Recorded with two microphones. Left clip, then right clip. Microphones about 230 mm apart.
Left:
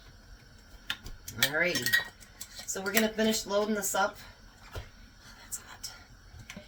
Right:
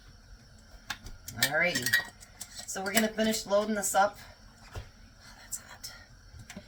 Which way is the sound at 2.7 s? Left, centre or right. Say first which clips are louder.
Even; centre.